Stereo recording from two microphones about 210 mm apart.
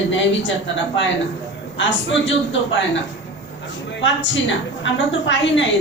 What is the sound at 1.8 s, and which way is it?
Speech, 60° left (ahead or behind).